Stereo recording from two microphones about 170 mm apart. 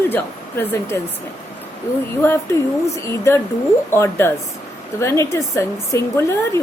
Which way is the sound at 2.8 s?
15° left (ahead or behind).